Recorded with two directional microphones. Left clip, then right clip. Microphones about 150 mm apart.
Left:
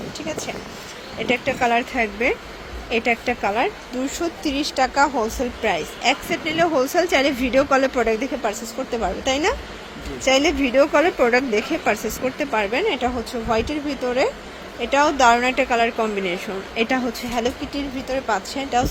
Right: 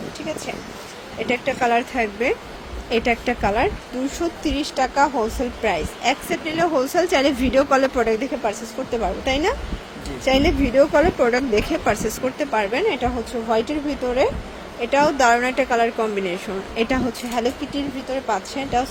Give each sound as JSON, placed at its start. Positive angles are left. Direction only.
{"t": 1.2, "sound": "speech", "side_deg": -5}
{"t": 11.3, "sound": "speech", "side_deg": -15}
{"t": 12.5, "sound": "speech", "side_deg": -5}